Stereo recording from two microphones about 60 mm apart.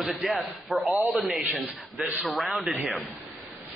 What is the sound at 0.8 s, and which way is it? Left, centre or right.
Speech, right.